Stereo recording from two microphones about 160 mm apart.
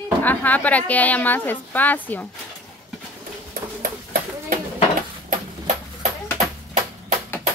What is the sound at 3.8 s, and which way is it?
Ping, 60° right (ahead or behind).